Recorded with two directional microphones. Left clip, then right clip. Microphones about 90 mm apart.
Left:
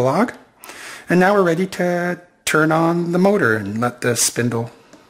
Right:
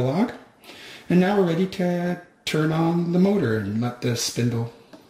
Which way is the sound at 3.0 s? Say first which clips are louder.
Left 6 dB; 35° left (ahead or behind).